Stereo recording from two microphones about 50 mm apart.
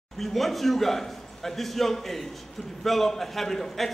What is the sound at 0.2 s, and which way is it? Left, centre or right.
A man's voice, centre.